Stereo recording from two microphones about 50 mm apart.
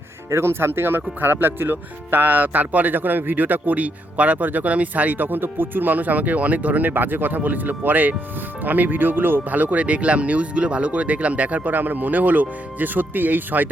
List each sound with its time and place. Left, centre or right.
0.3 s speech: right